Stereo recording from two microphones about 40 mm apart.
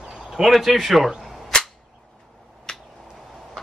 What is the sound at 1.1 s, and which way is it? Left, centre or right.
Cap gun, centre.